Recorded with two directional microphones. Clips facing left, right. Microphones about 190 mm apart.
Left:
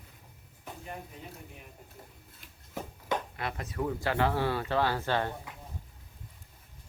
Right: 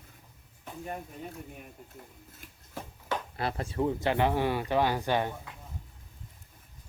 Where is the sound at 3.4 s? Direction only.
30° right (ahead or behind); by 5.3 s 15° right (ahead or behind).